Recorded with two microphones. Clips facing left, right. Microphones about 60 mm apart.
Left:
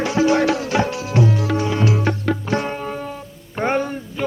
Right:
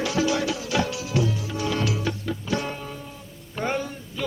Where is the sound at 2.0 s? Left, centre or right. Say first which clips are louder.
Left 7 dB; left.